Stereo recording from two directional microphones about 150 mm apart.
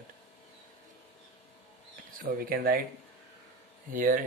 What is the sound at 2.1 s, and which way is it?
Speech, 75° right (ahead or behind).